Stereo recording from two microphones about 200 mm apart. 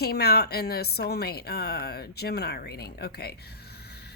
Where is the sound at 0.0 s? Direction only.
50° left (ahead or behind).